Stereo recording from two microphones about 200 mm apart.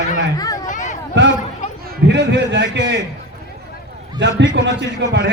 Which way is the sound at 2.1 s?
60° right (ahead or behind).